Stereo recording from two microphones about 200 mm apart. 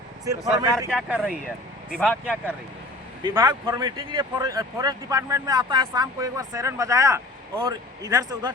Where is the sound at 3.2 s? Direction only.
20° right (ahead or behind).